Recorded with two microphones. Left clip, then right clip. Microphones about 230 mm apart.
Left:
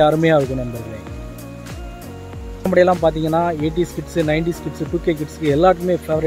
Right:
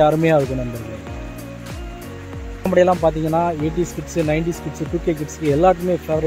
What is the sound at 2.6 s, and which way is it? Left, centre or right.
Speech, centre.